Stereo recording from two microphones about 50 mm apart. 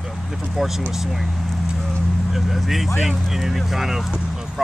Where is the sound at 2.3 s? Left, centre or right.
Centre.